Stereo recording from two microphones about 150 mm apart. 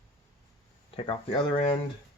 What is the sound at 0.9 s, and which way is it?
Speech, 35° left (ahead or behind).